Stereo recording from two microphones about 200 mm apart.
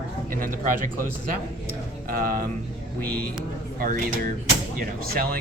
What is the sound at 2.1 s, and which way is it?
Speech, 50° right (ahead or behind).